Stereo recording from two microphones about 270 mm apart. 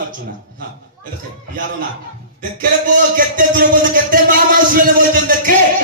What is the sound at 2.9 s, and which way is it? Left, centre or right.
A man's voice, right.